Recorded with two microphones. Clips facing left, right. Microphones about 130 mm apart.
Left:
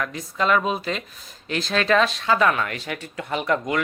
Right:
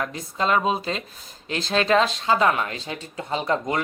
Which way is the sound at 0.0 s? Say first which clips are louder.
Left 1 dB; 30° right (ahead or behind).